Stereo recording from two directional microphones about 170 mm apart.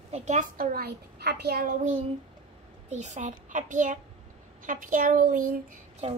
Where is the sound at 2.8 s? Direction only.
45° right (ahead or behind).